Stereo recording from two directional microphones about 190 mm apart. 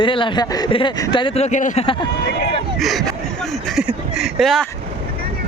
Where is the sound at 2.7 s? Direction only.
Centre (ahead or behind).